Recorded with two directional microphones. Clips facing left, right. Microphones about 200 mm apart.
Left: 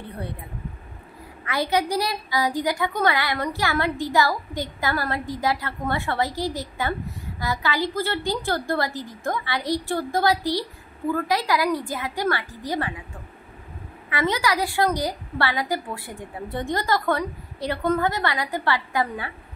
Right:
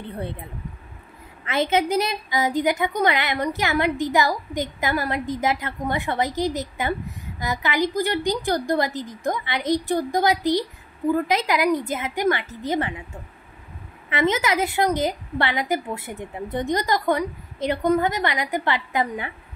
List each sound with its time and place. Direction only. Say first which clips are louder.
1.4 s a woman's voice: right 2 dB; 25° right (ahead or behind)